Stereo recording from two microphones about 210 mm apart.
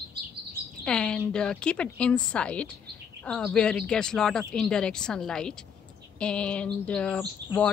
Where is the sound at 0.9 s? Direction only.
5° left (ahead or behind).